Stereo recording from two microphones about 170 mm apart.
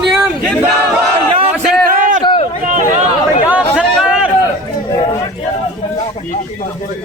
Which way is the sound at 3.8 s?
5° right (ahead or behind).